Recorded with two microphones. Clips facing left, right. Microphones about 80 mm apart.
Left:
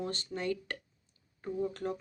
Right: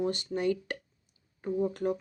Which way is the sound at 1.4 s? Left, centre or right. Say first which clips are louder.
Right 5 dB; right.